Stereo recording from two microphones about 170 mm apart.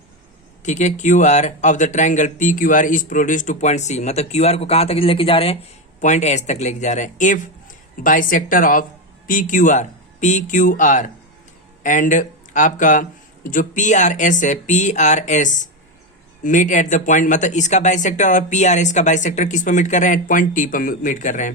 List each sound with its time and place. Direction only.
0.6 s speech: 45° left (ahead or behind)